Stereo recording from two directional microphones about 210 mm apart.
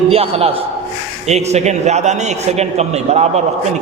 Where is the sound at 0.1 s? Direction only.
30° right (ahead or behind).